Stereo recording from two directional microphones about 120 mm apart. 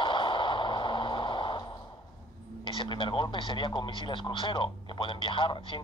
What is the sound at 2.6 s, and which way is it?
Speech, 40° left (ahead or behind).